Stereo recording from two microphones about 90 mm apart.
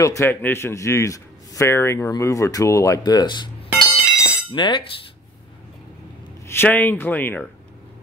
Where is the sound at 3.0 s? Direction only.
50° left (ahead or behind).